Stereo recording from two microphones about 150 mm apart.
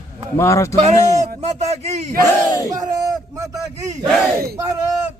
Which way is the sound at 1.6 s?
45° right (ahead or behind).